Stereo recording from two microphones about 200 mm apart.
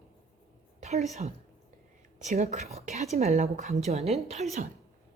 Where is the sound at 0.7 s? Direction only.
35° right (ahead or behind).